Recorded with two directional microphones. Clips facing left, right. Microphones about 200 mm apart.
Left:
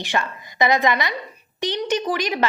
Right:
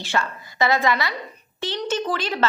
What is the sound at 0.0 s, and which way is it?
A woman's voice, 15° left (ahead or behind).